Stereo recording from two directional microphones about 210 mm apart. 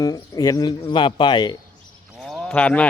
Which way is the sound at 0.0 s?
15° left (ahead or behind).